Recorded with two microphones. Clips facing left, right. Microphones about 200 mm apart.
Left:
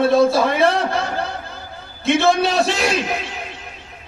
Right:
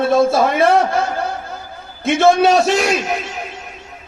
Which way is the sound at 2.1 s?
50° right (ahead or behind).